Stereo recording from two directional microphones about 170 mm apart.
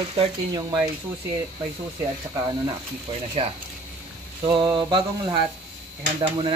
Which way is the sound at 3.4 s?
35° right (ahead or behind).